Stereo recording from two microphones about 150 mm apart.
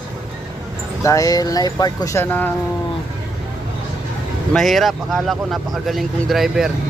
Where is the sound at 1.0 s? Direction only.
20° left (ahead or behind).